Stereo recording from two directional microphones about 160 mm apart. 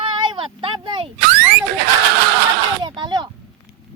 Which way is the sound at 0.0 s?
30° right (ahead or behind).